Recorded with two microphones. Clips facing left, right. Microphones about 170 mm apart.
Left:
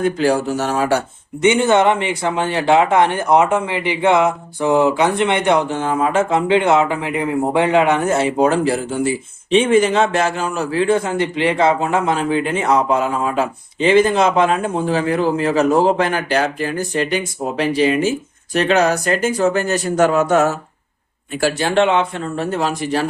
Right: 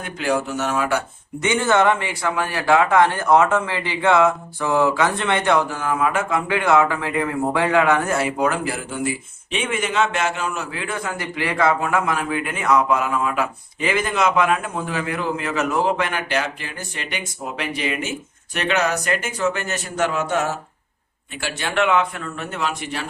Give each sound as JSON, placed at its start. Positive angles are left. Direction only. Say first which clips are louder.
{"t": 0.0, "sound": "a man's voice", "louder": "left 7 dB", "side_deg": 35}
{"t": 21.4, "sound": "a man's voice", "louder": "left 6 dB", "side_deg": 30}